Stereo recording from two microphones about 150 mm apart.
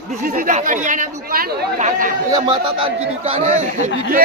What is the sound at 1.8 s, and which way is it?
Speech, 60° right (ahead or behind).